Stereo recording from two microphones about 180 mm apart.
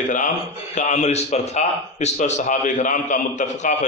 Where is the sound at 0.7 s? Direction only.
40° left (ahead or behind).